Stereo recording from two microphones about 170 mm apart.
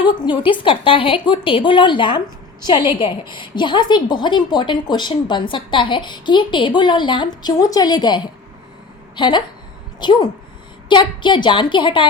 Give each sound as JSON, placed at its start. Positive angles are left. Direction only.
{"t": 0.0, "sound": "a woman's voice", "side_deg": 30}